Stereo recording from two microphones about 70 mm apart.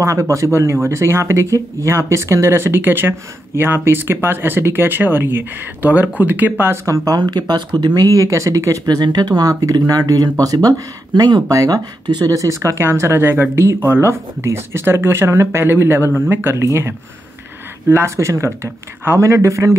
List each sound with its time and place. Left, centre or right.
0.0 s speech: right
7.2 s speech: right
8.8 s speech: right
11.1 s speech: right
11.4 s speech: right
12.8 s speech: right